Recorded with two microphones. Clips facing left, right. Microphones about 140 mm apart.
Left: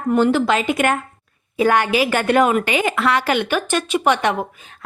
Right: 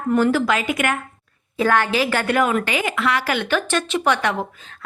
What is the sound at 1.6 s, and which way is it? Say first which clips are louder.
A woman's voice: left 2 dB; 15° left (ahead or behind).